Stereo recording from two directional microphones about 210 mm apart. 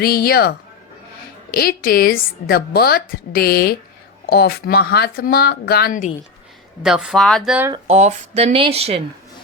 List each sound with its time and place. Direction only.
0.0 s speech: 45° left (ahead or behind)
1.5 s speech: 45° left (ahead or behind)
6.8 s speech: 5° right (ahead or behind)
7.9 s speech: 30° right (ahead or behind)